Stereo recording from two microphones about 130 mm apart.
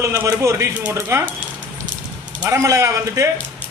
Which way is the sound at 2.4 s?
25° right (ahead or behind).